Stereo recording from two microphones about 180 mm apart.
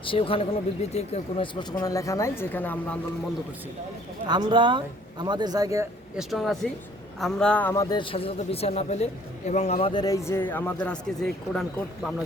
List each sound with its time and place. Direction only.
0.0 s speech: 30° left (ahead or behind)
1.8 s speech: 20° left (ahead or behind)
4.3 s speech: 25° right (ahead or behind)
6.1 s a man's voice: centre (ahead or behind); by 9.9 s 40° left (ahead or behind)
9.9 s speech: 20° left (ahead or behind); by 11.6 s 5° left (ahead or behind)